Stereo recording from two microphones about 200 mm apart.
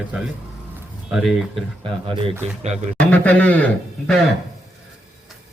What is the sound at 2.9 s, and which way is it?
Speech, 5° left (ahead or behind).